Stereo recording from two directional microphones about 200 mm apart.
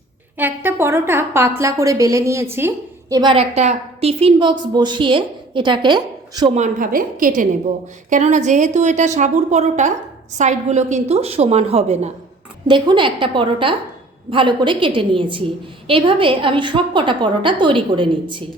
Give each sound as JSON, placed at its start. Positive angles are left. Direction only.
{"t": 0.3, "sound": "a woman's voice", "side_deg": -10}
{"t": 6.5, "sound": "a woman's voice", "side_deg": -40}